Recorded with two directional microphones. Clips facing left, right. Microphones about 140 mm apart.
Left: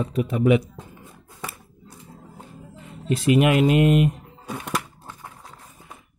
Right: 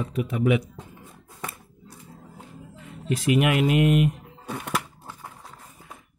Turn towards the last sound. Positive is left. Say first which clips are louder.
# even
turn(degrees=-10)  # may be behind; listen again after turning